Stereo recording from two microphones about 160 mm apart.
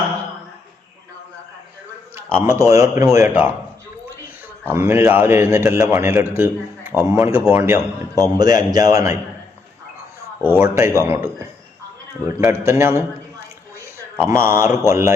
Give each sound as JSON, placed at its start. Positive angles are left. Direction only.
{"t": 2.1, "sound": "speech", "side_deg": -15}
{"t": 4.7, "sound": "a man's voice", "side_deg": -15}
{"t": 10.6, "sound": "speech", "side_deg": -15}
{"t": 13.7, "sound": "a sound", "side_deg": -15}
{"t": 14.8, "sound": "a man's voice", "side_deg": -20}